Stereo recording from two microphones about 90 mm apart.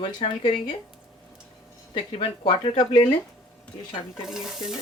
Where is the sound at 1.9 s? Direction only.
85° left.